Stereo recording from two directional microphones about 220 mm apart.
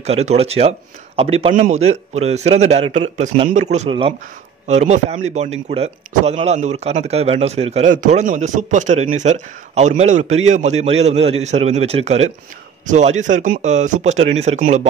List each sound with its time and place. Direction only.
0.0 s speech: 30° right (ahead or behind)